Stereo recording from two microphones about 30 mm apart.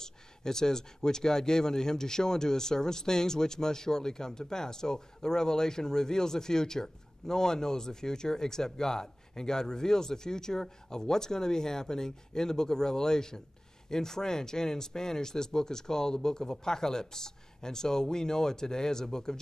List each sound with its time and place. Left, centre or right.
0.0 s speech: centre